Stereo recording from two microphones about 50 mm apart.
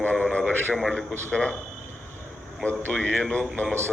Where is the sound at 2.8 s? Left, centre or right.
Left.